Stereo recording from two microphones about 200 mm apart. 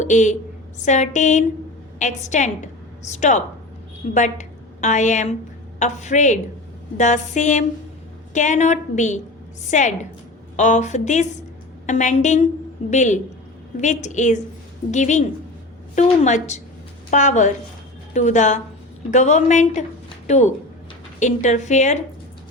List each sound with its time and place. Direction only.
0.0 s a woman's voice: 40° left (ahead or behind)